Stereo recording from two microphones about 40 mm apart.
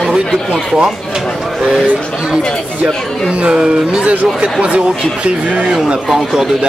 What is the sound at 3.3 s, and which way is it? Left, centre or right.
Speech, right.